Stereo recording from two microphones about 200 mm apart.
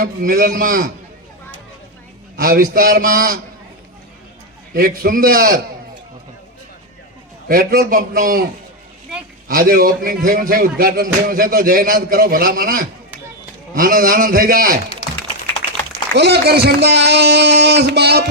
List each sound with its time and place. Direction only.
0.0 s a man's voice: 45° right (ahead or behind)
2.3 s a man's voice: 45° right (ahead or behind)
4.7 s a man's voice: 45° right (ahead or behind)
7.4 s a man's voice: 45° right (ahead or behind)
9.5 s a man's voice: 45° right (ahead or behind)
16.1 s speech: 55° right (ahead or behind)